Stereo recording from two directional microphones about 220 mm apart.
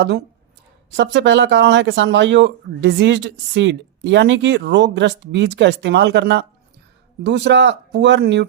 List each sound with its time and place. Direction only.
0.9 s speech: 55° right (ahead or behind)